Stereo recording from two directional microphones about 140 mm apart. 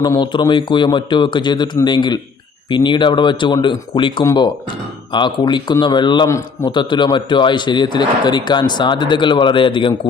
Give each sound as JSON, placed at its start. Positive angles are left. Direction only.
{"t": 0.0, "sound": "speech", "side_deg": 30}
{"t": 6.2, "sound": "a man's voice", "side_deg": 20}
{"t": 6.7, "sound": "speech", "side_deg": 35}